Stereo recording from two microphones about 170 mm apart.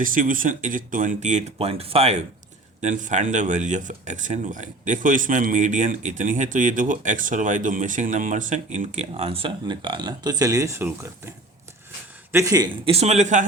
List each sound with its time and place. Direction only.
0.0 s a man's voice: 50° right (ahead or behind); by 10.9 s 15° right (ahead or behind)
12.3 s a man's voice: 20° right (ahead or behind); by 13.4 s 45° right (ahead or behind)